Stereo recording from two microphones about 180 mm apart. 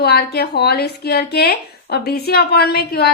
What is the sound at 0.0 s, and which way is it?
A woman's voice, 60° left (ahead or behind).